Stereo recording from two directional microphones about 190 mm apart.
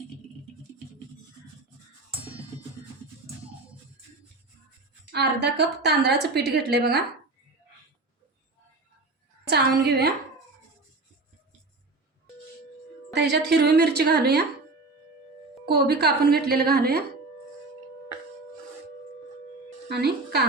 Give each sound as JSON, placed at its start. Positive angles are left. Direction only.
{"t": 5.1, "sound": "a woman's voice", "side_deg": -60}
{"t": 9.5, "sound": "a woman's voice", "side_deg": -55}
{"t": 13.1, "sound": "a woman's voice", "side_deg": -60}
{"t": 15.7, "sound": "a woman's voice", "side_deg": -55}
{"t": 19.9, "sound": "speech", "side_deg": -55}